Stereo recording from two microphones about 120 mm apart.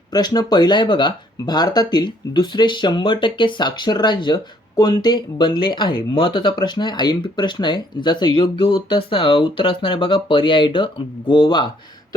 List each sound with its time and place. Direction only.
0.1 s speech: 35° left (ahead or behind)